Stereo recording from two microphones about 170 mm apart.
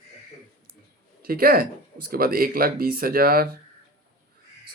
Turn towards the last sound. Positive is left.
turn(degrees=-60)  # may be behind; listen again after turning